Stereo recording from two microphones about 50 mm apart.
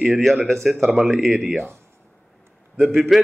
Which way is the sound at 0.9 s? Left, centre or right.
Centre.